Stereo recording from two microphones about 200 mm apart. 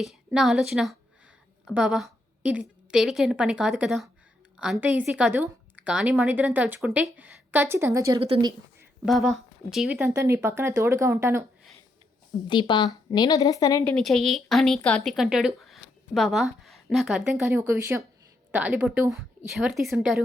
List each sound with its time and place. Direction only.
0.0 s a woman's voice: centre (ahead or behind); by 8.5 s 25° right (ahead or behind)
9.0 s a woman's voice: centre (ahead or behind)
12.5 s a woman's voice: 25° left (ahead or behind)
13.8 s a woman's voice: centre (ahead or behind)